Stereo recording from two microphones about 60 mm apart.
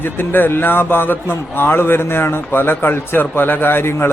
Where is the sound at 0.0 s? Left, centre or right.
Left.